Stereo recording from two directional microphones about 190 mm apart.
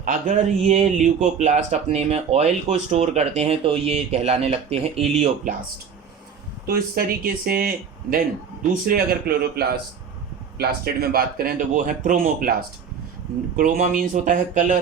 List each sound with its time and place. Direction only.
0.0 s speech: 40° right (ahead or behind)
6.7 s speech: 50° right (ahead or behind)
8.7 s speech: 50° right (ahead or behind)
13.6 s speech: 40° right (ahead or behind)